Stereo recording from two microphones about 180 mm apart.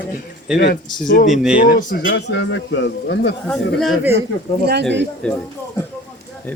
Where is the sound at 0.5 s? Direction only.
70° left (ahead or behind).